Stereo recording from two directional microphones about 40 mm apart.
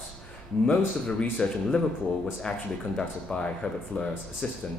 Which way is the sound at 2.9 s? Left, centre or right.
Left.